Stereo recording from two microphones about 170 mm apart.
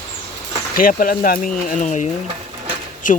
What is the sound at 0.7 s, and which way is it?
Speech, 55° left (ahead or behind).